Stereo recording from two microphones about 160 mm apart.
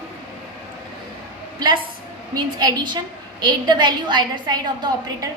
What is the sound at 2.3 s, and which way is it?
A woman's voice, 25° right (ahead or behind).